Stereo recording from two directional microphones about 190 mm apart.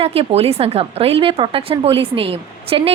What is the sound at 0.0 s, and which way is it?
A woman's voice, 30° right (ahead or behind).